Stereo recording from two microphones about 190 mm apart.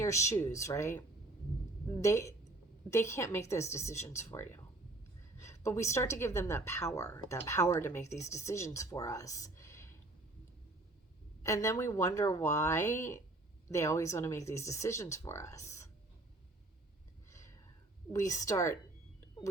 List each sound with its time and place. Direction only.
0.0 s a woman's voice: 15° left (ahead or behind)
11.4 s a woman's voice: 15° left (ahead or behind)
17.2 s a sound: 15° left (ahead or behind)
18.1 s a woman's voice: 15° left (ahead or behind)